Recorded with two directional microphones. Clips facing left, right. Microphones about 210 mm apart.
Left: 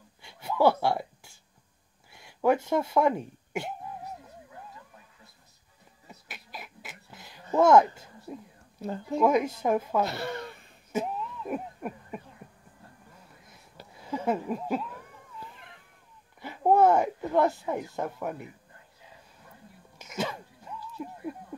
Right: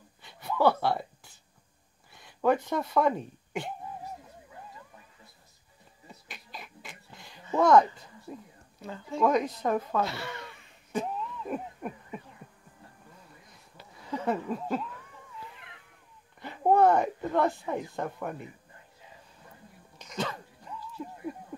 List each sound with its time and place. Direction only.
0.2 s a sound: 10° left (ahead or behind)
2.0 s speech: 10° left (ahead or behind)
6.2 s cough: 5° left (ahead or behind)
7.5 s speech: 10° left (ahead or behind)
8.8 s speech: 40° left (ahead or behind)
9.2 s speech: 10° left (ahead or behind)
10.0 s a sound: 45° left (ahead or behind)
10.9 s a sound: 10° left (ahead or behind)
14.1 s speech: 10° left (ahead or behind)
16.3 s speech: 5° left (ahead or behind)
20.0 s sneeze: 10° left (ahead or behind)
21.0 s a sound: 15° left (ahead or behind)